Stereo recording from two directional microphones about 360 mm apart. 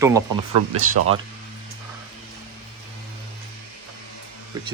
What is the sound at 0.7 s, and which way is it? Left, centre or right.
Speech, right.